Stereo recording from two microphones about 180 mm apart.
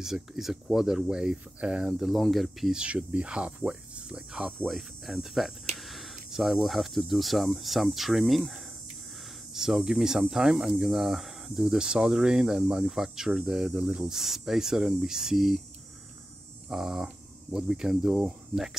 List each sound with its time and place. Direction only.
0.0 s speech: centre (ahead or behind)
16.6 s speech: centre (ahead or behind)